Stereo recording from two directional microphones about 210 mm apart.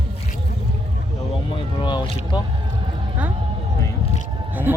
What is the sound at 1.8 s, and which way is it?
Boat, 20° left (ahead or behind).